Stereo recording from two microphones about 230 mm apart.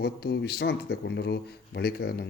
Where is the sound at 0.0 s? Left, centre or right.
Left.